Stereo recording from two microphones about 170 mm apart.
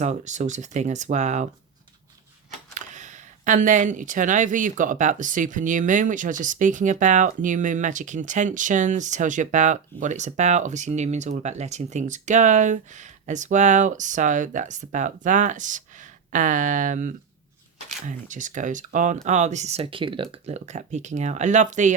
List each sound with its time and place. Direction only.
0.0 s speech: 45° right (ahead or behind)
2.7 s speech: 45° right (ahead or behind); by 20.2 s 30° right (ahead or behind)
20.3 s speech: 40° right (ahead or behind)